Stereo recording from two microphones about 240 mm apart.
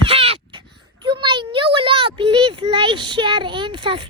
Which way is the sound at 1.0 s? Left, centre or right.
Right.